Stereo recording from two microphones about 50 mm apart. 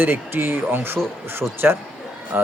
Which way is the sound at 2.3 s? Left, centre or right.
Right.